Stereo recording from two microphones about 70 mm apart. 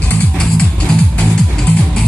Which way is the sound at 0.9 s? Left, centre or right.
Centre.